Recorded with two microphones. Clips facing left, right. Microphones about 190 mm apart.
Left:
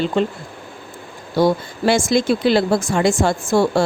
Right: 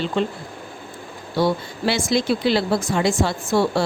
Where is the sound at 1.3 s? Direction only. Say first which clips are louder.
Left 4 dB; 45° left (ahead or behind).